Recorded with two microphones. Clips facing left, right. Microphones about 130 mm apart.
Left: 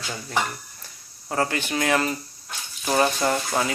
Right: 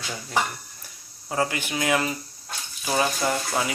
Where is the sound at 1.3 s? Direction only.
10° right (ahead or behind).